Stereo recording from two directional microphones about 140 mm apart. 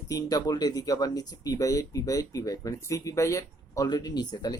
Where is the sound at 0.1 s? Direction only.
25° left (ahead or behind).